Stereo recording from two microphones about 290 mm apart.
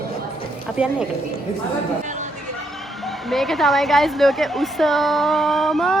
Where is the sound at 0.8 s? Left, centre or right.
Centre.